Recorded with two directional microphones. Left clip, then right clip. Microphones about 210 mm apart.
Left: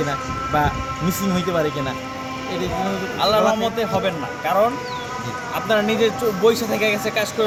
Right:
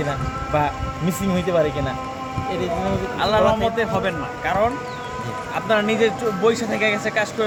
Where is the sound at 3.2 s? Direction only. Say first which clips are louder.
Left 1 dB; 10° left (ahead or behind).